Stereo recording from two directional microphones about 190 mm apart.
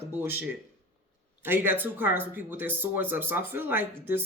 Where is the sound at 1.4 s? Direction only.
10° right (ahead or behind).